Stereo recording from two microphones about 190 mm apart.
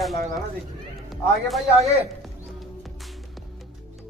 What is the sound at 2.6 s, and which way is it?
Music, centre (ahead or behind).